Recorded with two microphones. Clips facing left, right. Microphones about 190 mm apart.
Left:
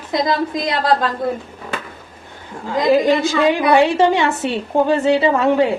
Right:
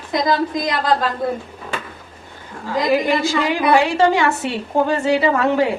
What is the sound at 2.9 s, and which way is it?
A woman's voice, 20° left (ahead or behind).